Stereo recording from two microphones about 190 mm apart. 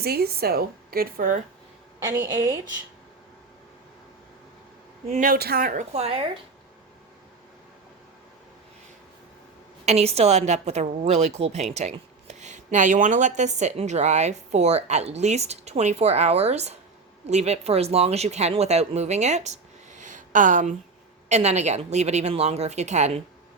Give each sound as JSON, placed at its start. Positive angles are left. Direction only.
{"t": 0.0, "sound": "a woman's voice", "side_deg": -55}
{"t": 2.0, "sound": "a woman's voice", "side_deg": -15}
{"t": 5.0, "sound": "a woman's voice", "side_deg": -40}
{"t": 9.8, "sound": "a woman's voice", "side_deg": -35}